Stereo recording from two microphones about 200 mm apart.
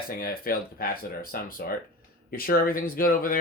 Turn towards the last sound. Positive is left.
turn(degrees=45)  # may be behind; listen again after turning